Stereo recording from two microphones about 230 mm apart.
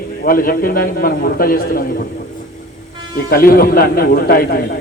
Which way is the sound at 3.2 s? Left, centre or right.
Left.